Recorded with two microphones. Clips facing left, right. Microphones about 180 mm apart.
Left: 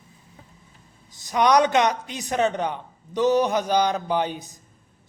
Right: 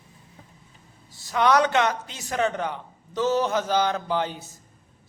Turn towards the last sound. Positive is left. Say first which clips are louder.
# left 2 dB
turn(degrees=15)  # may be behind; listen again after turning